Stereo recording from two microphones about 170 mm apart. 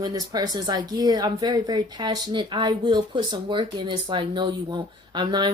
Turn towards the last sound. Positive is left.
turn(degrees=-25)  # may be behind; listen again after turning